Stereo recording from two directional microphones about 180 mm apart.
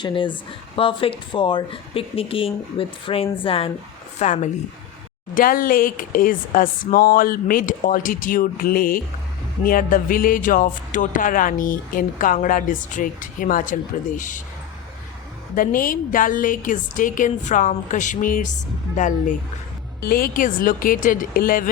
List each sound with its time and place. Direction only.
0.0 s a woman's voice: 30° left (ahead or behind)
5.3 s speech: 50° left (ahead or behind)
15.5 s speech: 50° left (ahead or behind)
20.0 s speech: 55° left (ahead or behind)